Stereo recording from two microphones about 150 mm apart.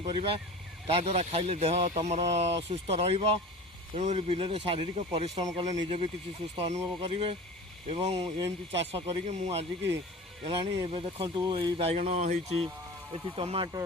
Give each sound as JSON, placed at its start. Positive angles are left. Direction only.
{"t": 0.2, "sound": "speech", "side_deg": -40}
{"t": 13.3, "sound": "speech", "side_deg": -40}